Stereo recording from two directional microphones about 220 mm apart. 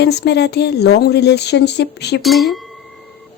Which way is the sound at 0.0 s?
50° left (ahead or behind).